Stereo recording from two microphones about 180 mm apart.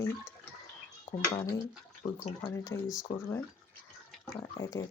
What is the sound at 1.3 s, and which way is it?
Speech, 25° left (ahead or behind).